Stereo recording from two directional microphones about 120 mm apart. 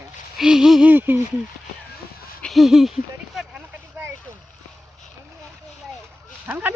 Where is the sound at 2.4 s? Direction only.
Centre (ahead or behind).